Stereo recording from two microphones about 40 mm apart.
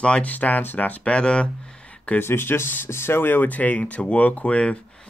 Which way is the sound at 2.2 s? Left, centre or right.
Left.